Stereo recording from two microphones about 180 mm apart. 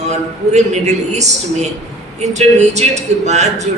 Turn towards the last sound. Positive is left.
turn(degrees=-40)  # may be behind; listen again after turning